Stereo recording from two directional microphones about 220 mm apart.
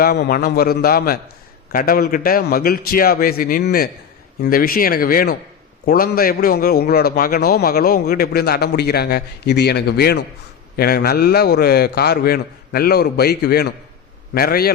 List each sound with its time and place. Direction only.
0.0 s a man's voice: 45° left (ahead or behind)